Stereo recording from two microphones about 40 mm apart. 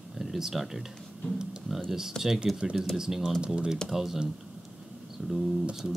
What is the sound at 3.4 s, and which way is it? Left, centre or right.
Speech, right.